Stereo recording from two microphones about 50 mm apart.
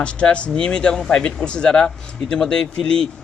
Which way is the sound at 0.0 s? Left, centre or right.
Left.